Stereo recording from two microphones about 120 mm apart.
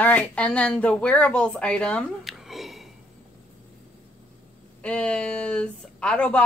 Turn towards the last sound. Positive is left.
turn(degrees=10)  # may be behind; listen again after turning